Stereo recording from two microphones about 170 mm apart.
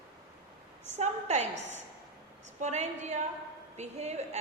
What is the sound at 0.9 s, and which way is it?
A woman's voice, 40° right (ahead or behind).